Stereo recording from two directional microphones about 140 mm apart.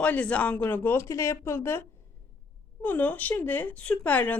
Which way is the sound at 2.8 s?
10° left (ahead or behind).